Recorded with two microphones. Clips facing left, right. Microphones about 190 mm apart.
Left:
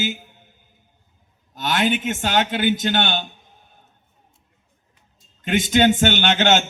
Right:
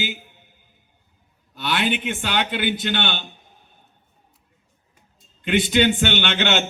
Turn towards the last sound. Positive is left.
turn(degrees=40)  # may be behind; listen again after turning